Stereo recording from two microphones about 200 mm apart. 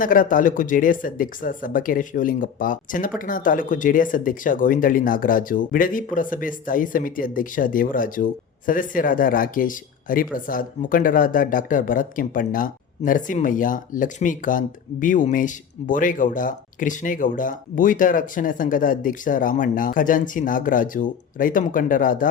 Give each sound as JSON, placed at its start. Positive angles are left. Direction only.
{"t": 0.0, "sound": "speech", "side_deg": 45}